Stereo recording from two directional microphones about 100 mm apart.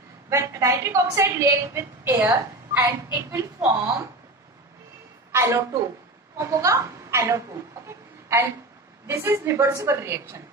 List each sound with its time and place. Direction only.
0.3 s a woman's voice: 30° right (ahead or behind)
5.3 s a woman's voice: 25° right (ahead or behind)